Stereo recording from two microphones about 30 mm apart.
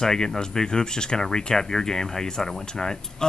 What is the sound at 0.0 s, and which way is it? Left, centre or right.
Speech, centre.